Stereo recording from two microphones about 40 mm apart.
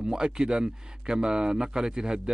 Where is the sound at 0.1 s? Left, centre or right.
Right.